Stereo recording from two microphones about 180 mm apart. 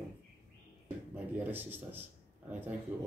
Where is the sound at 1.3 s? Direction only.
10° right (ahead or behind).